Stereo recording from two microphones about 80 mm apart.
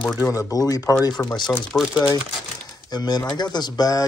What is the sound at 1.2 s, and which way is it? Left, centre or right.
Speech, left.